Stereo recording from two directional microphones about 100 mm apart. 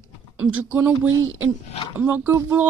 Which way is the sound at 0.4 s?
15° right (ahead or behind).